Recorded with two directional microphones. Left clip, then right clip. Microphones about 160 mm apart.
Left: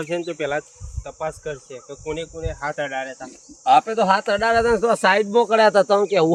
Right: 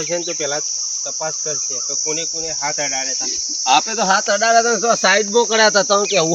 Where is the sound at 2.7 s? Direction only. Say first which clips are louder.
Right 4 dB; 5° right (ahead or behind).